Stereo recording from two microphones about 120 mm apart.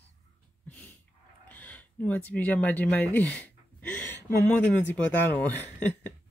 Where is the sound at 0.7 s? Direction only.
10° left (ahead or behind).